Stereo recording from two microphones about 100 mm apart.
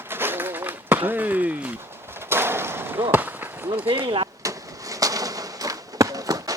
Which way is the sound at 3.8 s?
60° right (ahead or behind).